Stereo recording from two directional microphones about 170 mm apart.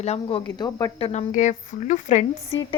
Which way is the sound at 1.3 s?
45° left (ahead or behind).